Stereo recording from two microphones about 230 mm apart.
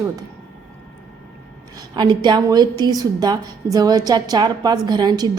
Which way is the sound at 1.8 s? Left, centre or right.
Centre.